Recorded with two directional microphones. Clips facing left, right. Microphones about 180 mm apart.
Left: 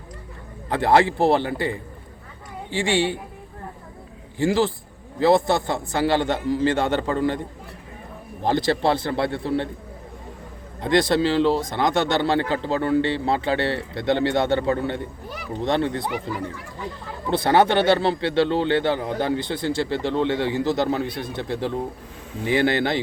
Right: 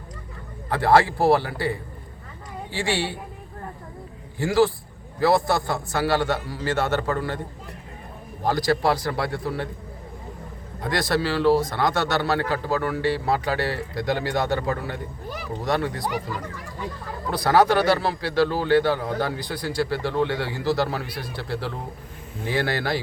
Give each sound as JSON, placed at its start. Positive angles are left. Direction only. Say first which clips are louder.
{"t": 0.7, "sound": "a woman's voice", "louder": "left 1 dB", "side_deg": 20}
{"t": 4.4, "sound": "speech", "louder": "right 1 dB", "side_deg": 20}
{"t": 8.4, "sound": "speech", "louder": "left 1 dB", "side_deg": 25}
{"t": 10.8, "sound": "a man's voice", "louder": "left 5 dB", "side_deg": 25}
{"t": 17.3, "sound": "speech", "louder": "left 1 dB", "side_deg": 25}